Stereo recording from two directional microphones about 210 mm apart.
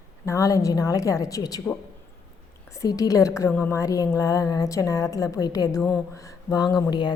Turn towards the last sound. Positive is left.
turn(degrees=20)  # may be behind; listen again after turning